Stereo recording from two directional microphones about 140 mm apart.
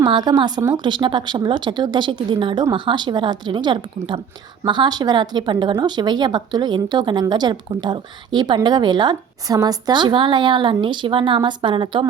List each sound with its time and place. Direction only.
0.0 s speech: 30° right (ahead or behind)